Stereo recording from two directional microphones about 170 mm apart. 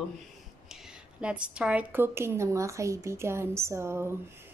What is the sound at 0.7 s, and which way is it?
A woman's voice, 5° right (ahead or behind).